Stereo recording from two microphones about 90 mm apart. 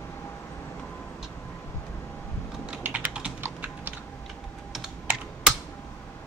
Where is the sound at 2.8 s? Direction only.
15° right (ahead or behind).